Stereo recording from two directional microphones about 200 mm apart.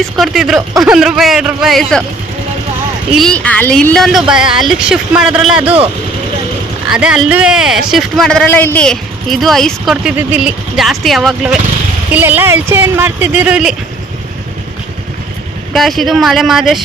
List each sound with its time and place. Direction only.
0.2 s a woman's voice: centre (ahead or behind)
3.2 s a woman's voice: 5° left (ahead or behind)
6.9 s a woman's voice: 5° right (ahead or behind)
15.7 s a woman's voice: centre (ahead or behind)